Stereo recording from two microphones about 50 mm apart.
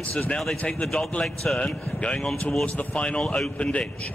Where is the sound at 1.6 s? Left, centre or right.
Centre.